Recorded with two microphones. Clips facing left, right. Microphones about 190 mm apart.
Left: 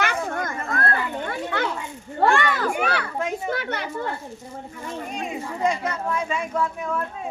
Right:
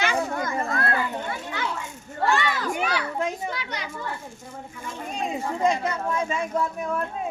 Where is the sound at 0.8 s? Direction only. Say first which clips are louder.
Left 1 dB; 60° left (ahead or behind).